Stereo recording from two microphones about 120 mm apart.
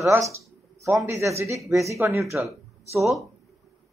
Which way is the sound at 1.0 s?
25° right (ahead or behind).